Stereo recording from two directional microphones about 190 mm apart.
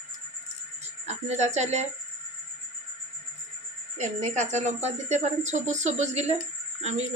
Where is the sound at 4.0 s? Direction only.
35° right (ahead or behind).